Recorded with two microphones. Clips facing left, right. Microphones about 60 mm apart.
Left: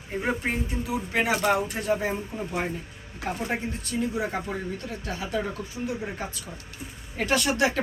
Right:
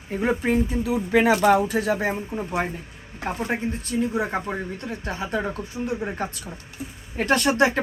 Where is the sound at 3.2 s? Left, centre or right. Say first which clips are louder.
Right 3 dB; right.